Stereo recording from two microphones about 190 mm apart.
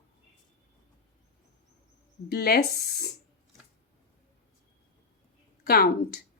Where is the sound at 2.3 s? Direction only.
55° left (ahead or behind).